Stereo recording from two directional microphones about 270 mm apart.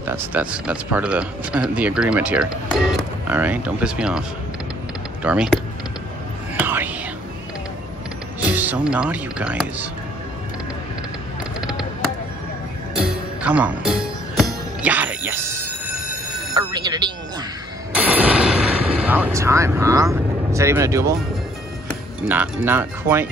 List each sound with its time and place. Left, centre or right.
0.0 s speech: centre
5.2 s speech: centre
6.6 s whispering: centre
8.5 s music: centre
8.9 s speech: centre
13.0 s music: centre
16.5 s music: centre
17.9 s artillery fire: centre
22.3 s speech: centre